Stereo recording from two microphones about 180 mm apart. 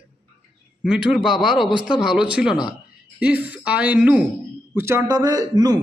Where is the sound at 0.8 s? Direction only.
5° right (ahead or behind).